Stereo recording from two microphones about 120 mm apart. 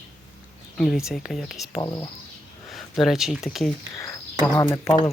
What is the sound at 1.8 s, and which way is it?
Speech, 35° left (ahead or behind).